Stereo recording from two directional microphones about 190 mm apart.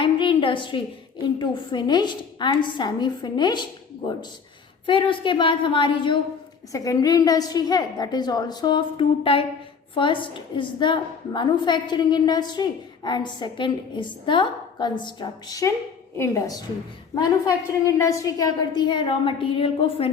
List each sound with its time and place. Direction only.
0.0 s a sound: 25° left (ahead or behind)
1.4 s a woman's voice: 25° left (ahead or behind)
17.9 s a woman's voice: 15° left (ahead or behind)